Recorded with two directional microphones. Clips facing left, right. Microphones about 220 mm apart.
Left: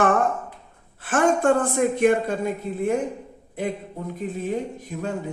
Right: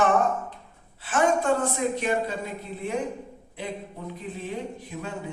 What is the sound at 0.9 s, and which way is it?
Speech, 50° left (ahead or behind).